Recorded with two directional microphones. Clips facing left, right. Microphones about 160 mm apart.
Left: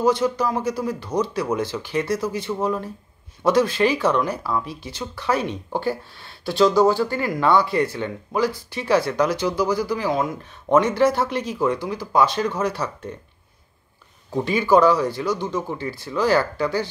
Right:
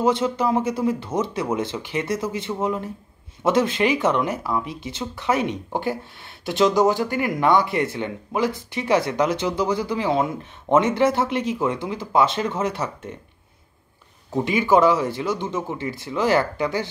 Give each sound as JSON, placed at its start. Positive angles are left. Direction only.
{"t": 0.0, "sound": "speech", "side_deg": -25}
{"t": 14.3, "sound": "speech", "side_deg": -20}